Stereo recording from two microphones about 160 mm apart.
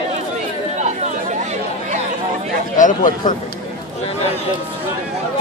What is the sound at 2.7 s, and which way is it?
Speech, 55° left (ahead or behind).